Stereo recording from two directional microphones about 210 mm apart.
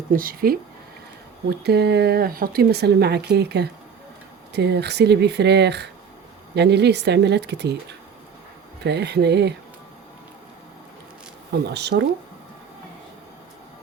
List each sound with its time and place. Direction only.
0.1 s speech: 45° right (ahead or behind)
11.7 s speech: 55° right (ahead or behind)